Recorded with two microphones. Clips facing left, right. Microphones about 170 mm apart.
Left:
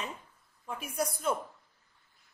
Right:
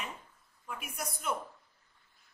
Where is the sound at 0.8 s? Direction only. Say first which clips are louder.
Left 10 dB; 30° left (ahead or behind).